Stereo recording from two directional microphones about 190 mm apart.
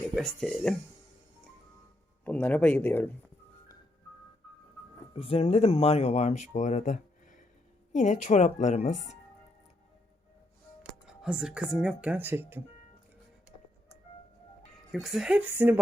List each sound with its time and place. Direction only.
0.1 s speech: centre (ahead or behind)
2.2 s speech: 5° left (ahead or behind)
5.1 s speech: 30° left (ahead or behind)
11.2 s speech: 5° right (ahead or behind)
14.9 s a woman's voice: centre (ahead or behind)